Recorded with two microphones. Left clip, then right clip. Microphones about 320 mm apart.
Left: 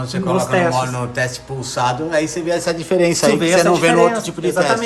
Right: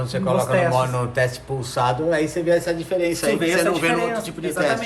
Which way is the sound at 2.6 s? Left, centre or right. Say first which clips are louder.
Left 6 dB; centre.